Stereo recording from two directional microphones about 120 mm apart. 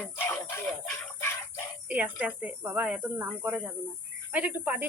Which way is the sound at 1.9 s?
15° right (ahead or behind).